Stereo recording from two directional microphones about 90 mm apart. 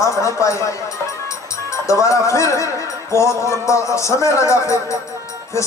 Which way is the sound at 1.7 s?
35° left (ahead or behind).